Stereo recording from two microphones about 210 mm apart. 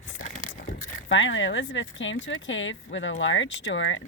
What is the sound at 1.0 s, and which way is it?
Speech, 65° left (ahead or behind).